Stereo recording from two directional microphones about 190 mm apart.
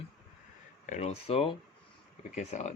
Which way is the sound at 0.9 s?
35° left (ahead or behind).